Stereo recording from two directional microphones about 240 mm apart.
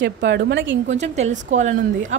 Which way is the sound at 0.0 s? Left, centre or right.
Right.